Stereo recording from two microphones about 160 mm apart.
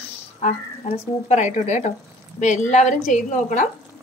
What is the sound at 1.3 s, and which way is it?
Speech, 45° left (ahead or behind).